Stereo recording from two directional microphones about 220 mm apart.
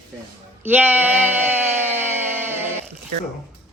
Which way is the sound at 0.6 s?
10° right (ahead or behind).